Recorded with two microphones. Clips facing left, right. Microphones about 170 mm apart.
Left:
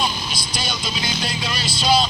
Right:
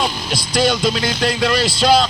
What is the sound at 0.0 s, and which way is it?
Speech, 90° right.